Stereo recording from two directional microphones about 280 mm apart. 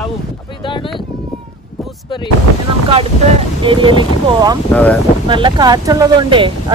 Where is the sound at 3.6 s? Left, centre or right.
Centre.